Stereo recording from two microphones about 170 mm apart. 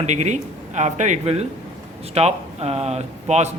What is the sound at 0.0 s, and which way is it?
A man's voice, 45° right (ahead or behind).